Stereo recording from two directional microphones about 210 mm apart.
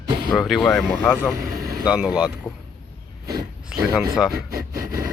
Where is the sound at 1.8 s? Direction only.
5° right (ahead or behind).